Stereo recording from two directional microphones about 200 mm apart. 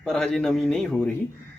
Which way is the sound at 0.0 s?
5° left (ahead or behind).